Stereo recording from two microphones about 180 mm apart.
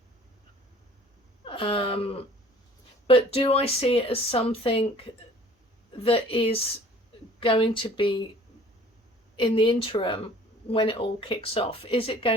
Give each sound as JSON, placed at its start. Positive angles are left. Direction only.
{"t": 1.5, "sound": "a sound", "side_deg": 30}
{"t": 3.1, "sound": "speech", "side_deg": 30}
{"t": 9.3, "sound": "speech", "side_deg": 25}